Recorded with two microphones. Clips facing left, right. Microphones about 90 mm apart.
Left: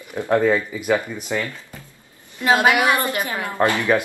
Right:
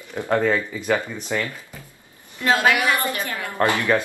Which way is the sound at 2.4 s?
20° left (ahead or behind).